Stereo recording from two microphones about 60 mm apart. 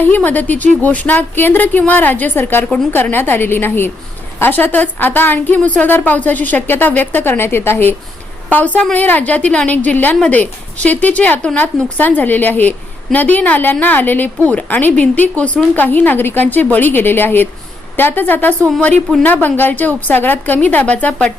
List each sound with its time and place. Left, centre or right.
0.2 s a woman's voice: left
8.4 s a woman's voice: left